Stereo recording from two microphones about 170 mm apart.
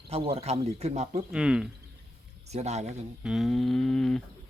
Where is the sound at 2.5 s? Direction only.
40° right (ahead or behind).